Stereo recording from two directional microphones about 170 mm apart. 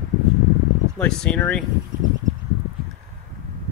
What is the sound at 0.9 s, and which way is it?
Speech, 5° left (ahead or behind).